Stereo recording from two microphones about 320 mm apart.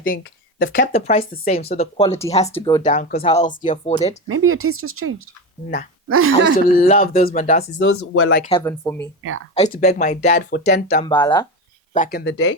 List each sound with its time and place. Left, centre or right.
0.0 s speech: left
2.6 s speech: centre
2.8 s speech: left
4.3 s speech: right
6.7 s speech: left
7.9 s speech: left
8.4 s speech: centre
9.6 s speech: left
11.0 s speech: centre
11.9 s speech: left
12.2 s speech: left